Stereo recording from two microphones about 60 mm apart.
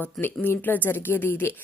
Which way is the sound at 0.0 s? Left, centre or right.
Left.